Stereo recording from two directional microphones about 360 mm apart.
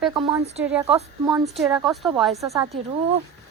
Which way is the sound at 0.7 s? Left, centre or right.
Centre.